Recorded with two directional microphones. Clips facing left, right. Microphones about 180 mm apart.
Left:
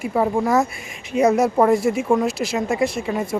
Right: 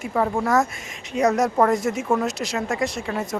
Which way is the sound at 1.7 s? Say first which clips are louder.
Left 4 dB; 40° right (ahead or behind).